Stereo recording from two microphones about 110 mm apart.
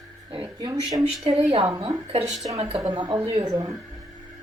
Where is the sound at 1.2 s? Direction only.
55° right (ahead or behind).